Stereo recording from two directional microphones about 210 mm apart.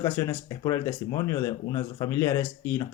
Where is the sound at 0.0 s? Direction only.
15° left (ahead or behind).